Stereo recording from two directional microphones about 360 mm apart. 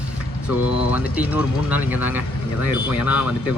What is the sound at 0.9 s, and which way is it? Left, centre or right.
Speech, centre.